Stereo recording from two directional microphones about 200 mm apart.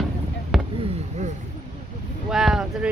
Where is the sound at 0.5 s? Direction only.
Centre (ahead or behind).